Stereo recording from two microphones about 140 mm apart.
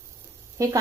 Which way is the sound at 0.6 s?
25° right (ahead or behind).